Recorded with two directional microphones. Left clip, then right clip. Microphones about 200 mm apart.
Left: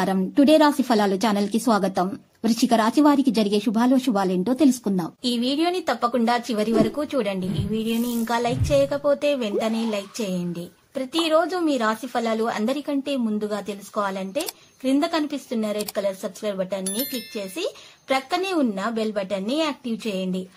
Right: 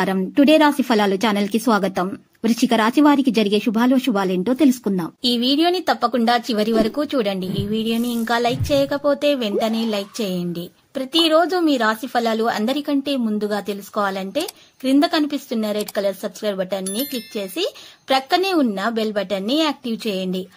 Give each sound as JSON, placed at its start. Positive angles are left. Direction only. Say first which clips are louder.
{"t": 0.0, "sound": "speech", "louder": "right 3 dB", "side_deg": -15}
{"t": 16.8, "sound": "speech", "louder": "right 3 dB", "side_deg": 0}
{"t": 17.4, "sound": "speech", "louder": "right 5 dB", "side_deg": -25}